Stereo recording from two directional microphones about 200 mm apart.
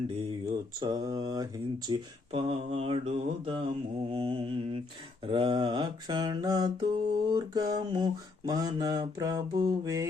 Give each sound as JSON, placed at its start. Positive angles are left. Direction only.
{"t": 0.8, "sound": "mantra", "side_deg": -20}